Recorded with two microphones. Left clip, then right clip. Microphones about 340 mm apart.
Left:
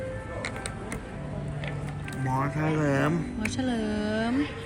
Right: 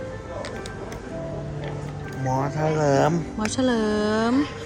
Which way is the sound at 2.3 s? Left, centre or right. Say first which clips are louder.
Right 4 dB; centre.